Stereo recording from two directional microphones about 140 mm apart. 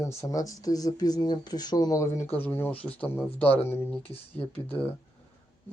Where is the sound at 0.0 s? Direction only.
20° left (ahead or behind).